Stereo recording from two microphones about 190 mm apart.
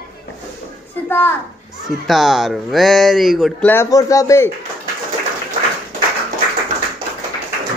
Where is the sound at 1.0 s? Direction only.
10° left (ahead or behind).